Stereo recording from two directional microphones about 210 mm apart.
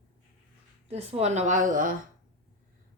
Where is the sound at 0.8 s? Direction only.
30° right (ahead or behind).